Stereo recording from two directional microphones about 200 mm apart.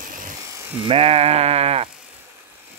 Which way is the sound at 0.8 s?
30° right (ahead or behind).